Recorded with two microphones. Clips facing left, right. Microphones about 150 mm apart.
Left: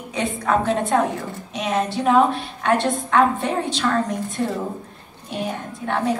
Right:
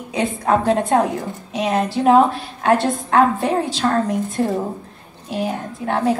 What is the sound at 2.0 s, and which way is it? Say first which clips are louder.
A woman's voice: right 4 dB; 40° right (ahead or behind).